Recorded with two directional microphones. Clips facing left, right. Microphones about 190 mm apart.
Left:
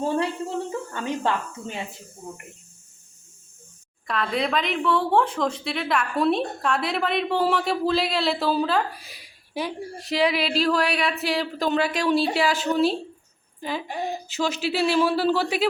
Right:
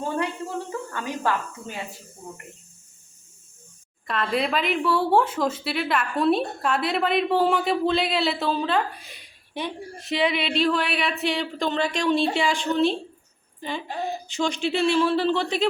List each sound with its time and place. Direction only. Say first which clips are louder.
0.0 s a woman's voice: left 3 dB; 25° left (ahead or behind)
4.0 s a woman's voice: even; centre (ahead or behind)